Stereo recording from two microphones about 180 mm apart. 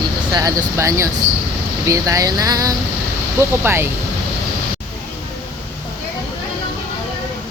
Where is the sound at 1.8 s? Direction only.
15° right (ahead or behind).